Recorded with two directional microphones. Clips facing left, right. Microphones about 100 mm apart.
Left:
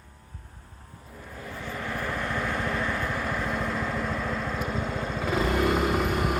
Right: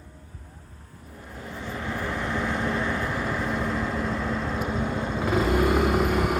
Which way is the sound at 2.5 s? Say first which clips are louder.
Right 2 dB; 20° right (ahead or behind).